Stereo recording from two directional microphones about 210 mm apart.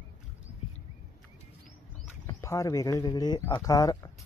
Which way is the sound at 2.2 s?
15° left (ahead or behind).